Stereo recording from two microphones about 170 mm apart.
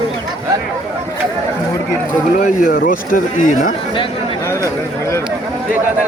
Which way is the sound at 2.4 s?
50° left (ahead or behind).